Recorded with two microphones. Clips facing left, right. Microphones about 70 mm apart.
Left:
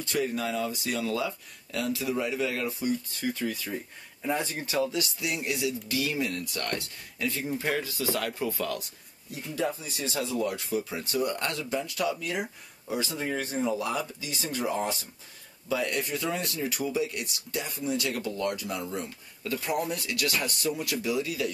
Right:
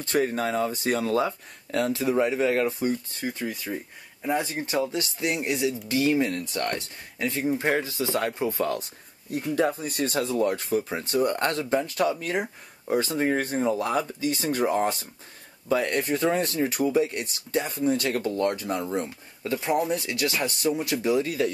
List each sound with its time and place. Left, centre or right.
0.0 s speech: right
3.6 s speech: centre; by 8.8 s right
9.3 s speech: right
19.0 s speech: right